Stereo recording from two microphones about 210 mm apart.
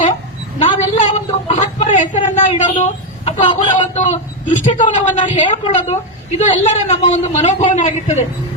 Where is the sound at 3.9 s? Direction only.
35° left (ahead or behind).